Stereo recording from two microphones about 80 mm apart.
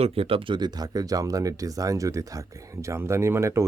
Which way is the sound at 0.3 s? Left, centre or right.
Right.